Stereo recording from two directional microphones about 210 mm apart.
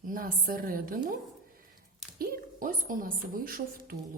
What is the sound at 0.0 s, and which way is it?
A woman's voice, 40° right (ahead or behind).